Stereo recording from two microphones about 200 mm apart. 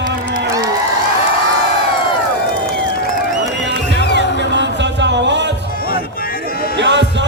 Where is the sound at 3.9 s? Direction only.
60° left (ahead or behind).